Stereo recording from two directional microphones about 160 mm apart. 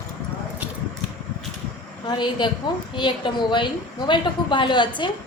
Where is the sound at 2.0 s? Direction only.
30° left (ahead or behind).